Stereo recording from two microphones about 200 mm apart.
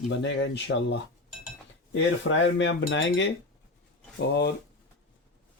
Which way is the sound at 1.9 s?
65° left (ahead or behind).